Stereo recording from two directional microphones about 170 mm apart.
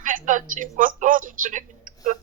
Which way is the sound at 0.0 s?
50° right (ahead or behind).